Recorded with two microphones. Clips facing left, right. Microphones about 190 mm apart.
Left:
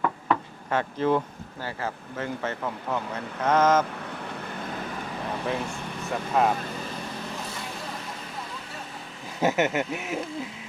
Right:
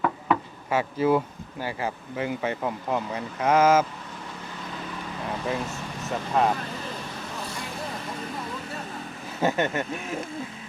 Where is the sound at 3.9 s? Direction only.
60° left (ahead or behind).